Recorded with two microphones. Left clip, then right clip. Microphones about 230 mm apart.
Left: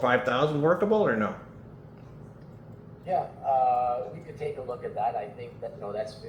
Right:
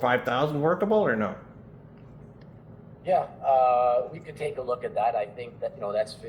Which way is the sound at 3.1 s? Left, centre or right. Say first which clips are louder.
Right 4 dB; right.